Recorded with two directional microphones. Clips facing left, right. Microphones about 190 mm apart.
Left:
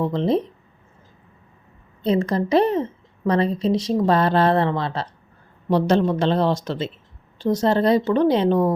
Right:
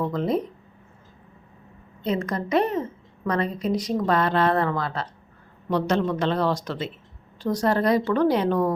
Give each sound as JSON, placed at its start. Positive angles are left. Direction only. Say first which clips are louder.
{"t": 0.0, "sound": "a woman's voice", "louder": "left 4 dB", "side_deg": 25}
{"t": 2.0, "sound": "a woman's voice", "louder": "left 6 dB", "side_deg": 30}